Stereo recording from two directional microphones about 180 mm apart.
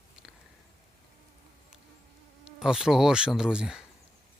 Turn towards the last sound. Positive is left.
turn(degrees=-5)  # may be behind; listen again after turning